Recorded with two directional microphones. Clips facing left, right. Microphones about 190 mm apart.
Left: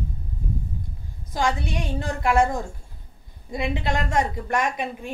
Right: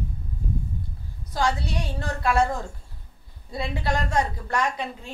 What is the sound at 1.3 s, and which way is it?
A woman's voice, 15° left (ahead or behind).